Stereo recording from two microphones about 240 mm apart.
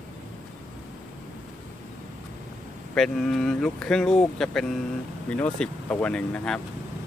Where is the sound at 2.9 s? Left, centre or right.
Centre.